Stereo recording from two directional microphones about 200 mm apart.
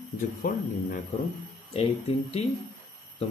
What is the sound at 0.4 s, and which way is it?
Speech, 45° left (ahead or behind).